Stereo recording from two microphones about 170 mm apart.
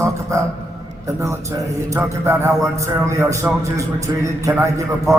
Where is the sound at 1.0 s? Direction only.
15° right (ahead or behind).